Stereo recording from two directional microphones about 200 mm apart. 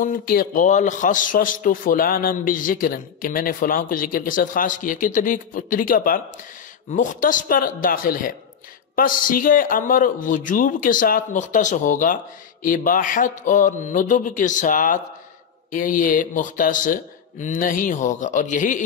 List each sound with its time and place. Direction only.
0.0 s a man's voice: 45° left (ahead or behind)